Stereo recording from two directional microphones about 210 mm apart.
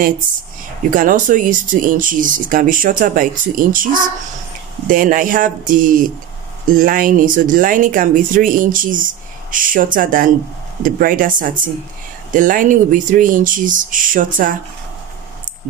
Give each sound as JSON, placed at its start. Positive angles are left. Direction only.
{"t": 0.8, "sound": "speech", "side_deg": -40}